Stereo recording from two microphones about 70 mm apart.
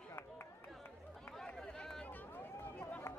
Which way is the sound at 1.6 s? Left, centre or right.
Centre.